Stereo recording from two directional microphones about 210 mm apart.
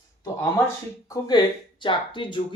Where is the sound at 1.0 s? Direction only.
15° left (ahead or behind).